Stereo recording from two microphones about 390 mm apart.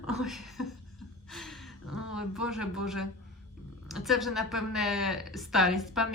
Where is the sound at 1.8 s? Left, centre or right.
Left.